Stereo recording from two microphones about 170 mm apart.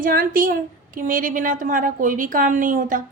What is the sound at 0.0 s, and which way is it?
A woman's voice, 55° right (ahead or behind).